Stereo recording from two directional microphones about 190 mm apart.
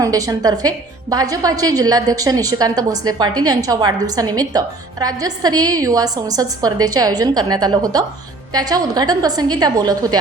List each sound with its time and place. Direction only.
0.0 s a woman's voice: 20° right (ahead or behind)